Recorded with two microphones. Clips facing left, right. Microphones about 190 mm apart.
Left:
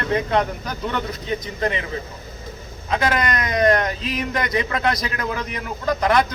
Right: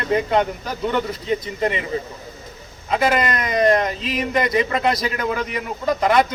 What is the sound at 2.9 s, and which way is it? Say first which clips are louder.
Speech: right 2 dB; 5° right (ahead or behind).